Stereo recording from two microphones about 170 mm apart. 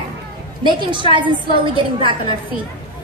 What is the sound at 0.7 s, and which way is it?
Speech, 30° right (ahead or behind).